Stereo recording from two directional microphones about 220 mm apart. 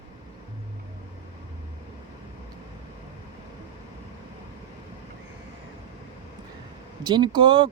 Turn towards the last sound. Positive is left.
turn(degrees=-20)  # may be behind; listen again after turning